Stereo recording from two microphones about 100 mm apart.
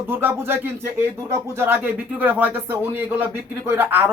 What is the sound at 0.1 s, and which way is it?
Speech, 20° right (ahead or behind).